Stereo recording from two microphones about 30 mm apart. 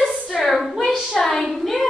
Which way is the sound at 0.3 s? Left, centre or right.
Centre.